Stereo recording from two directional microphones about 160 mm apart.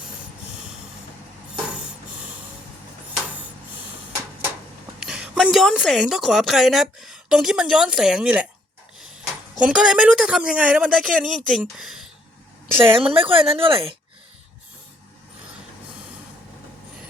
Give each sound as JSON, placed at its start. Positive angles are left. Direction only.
{"t": 4.9, "sound": "a woman's voice", "side_deg": -5}
{"t": 9.6, "sound": "speech", "side_deg": -5}
{"t": 12.8, "sound": "speech", "side_deg": -35}